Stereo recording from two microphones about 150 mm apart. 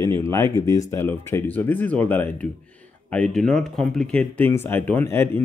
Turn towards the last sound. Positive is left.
turn(degrees=15)  # may be behind; listen again after turning